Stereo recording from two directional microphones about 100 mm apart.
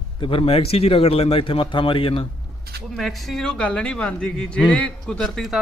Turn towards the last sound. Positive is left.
turn(degrees=0)  # may be behind; listen again after turning